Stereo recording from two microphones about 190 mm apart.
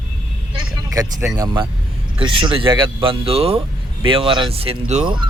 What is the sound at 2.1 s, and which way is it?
Speech, 30° right (ahead or behind).